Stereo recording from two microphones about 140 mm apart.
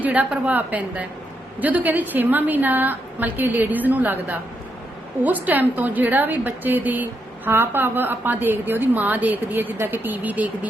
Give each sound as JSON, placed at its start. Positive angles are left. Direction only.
{"t": 0.0, "sound": "a woman's voice", "side_deg": -10}